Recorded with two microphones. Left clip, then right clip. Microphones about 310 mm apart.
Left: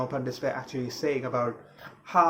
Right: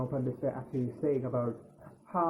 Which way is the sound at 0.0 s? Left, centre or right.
Centre.